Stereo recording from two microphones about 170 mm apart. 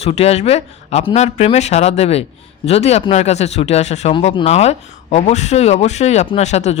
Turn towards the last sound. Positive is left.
turn(degrees=40)  # may be behind; listen again after turning